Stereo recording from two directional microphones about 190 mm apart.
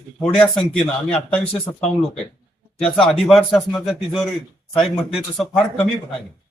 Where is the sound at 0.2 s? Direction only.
5° left (ahead or behind).